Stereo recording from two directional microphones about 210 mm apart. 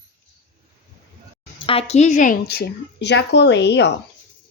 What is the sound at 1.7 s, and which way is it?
Speech, 30° left (ahead or behind).